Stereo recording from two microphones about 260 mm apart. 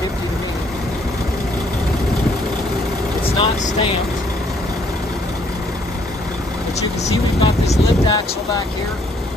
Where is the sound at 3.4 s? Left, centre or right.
Left.